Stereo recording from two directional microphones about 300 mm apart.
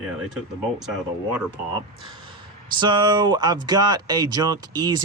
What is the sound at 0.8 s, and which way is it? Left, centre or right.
Speech, centre.